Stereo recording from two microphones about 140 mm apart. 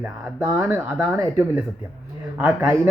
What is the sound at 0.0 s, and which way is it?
Speech, 15° right (ahead or behind).